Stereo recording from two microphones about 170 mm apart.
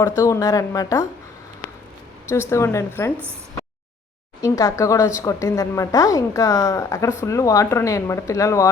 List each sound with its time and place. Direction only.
0.0 s speech: 20° left (ahead or behind)
2.3 s speech: 15° left (ahead or behind)
4.4 s speech: 20° left (ahead or behind)